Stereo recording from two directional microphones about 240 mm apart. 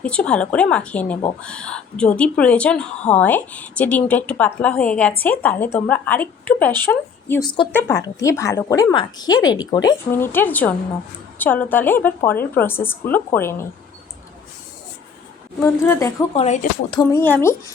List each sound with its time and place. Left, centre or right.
0.0 s a woman's voice: centre
7.7 s a woman's voice: centre
15.6 s a woman's voice: centre
16.3 s speech: left
17.0 s a woman's voice: centre